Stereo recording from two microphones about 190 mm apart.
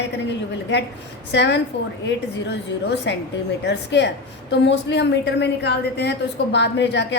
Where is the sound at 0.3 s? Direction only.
65° left (ahead or behind).